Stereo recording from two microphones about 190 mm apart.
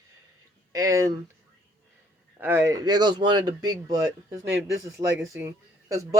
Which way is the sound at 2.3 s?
10° right (ahead or behind).